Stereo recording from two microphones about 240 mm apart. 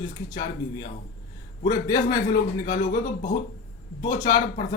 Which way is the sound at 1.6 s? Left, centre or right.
Centre.